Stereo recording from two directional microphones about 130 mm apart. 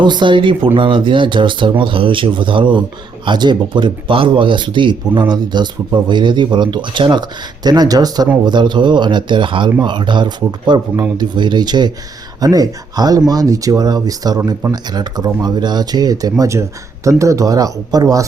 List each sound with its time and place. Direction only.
0.0 s speech: 35° right (ahead or behind)